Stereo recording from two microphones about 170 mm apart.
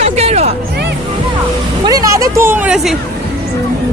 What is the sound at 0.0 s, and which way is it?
Music, 40° right (ahead or behind).